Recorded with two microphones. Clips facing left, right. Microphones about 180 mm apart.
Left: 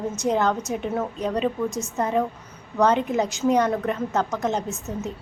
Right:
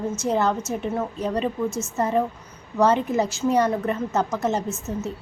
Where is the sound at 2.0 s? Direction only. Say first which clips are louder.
Right 1 dB; 5° right (ahead or behind).